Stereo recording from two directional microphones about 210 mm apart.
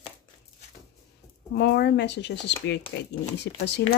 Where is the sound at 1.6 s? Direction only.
50° left (ahead or behind).